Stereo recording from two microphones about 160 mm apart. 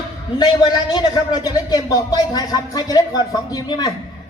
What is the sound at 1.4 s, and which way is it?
Speech, 25° left (ahead or behind).